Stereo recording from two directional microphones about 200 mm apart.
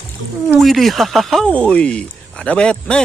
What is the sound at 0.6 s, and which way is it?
Speech, centre (ahead or behind).